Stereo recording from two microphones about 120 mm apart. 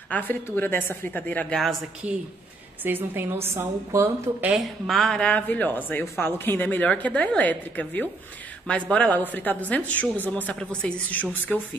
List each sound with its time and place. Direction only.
0.1 s a woman's voice: 15° left (ahead or behind)
2.8 s a woman's voice: 15° right (ahead or behind)
4.5 s a woman's voice: centre (ahead or behind)